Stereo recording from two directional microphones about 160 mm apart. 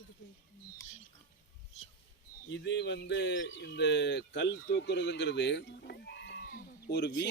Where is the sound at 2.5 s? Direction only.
90° left.